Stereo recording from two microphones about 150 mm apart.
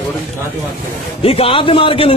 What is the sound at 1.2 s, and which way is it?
Speech, 40° left (ahead or behind).